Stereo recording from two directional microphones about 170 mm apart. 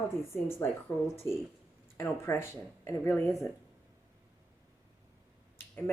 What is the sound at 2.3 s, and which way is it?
Speech, 15° left (ahead or behind).